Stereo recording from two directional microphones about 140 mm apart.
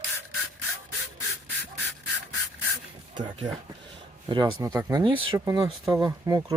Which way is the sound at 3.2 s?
35° right (ahead or behind).